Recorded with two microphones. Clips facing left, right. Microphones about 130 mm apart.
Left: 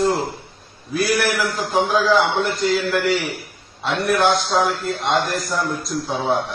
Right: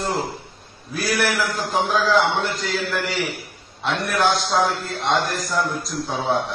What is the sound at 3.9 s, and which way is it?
A man's voice, centre (ahead or behind).